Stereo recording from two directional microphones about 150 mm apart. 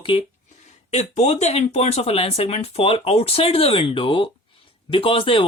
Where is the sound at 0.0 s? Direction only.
35° left (ahead or behind).